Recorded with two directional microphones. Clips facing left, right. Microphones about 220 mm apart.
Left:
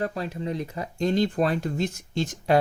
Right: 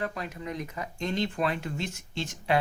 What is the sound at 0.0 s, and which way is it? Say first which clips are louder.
Speech: left 5 dB; 35° left (ahead or behind).